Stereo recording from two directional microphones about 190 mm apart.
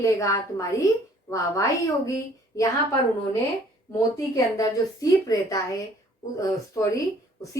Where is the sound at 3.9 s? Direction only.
15° left (ahead or behind).